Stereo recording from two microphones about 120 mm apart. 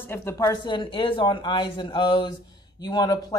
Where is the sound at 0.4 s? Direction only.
35° left (ahead or behind).